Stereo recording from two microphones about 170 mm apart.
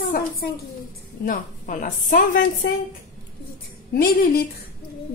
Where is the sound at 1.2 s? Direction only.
50° left (ahead or behind).